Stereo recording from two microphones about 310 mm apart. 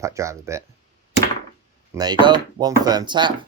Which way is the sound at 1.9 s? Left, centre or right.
Centre.